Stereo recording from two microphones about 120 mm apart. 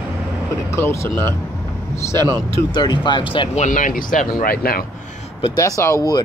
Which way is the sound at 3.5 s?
85° left.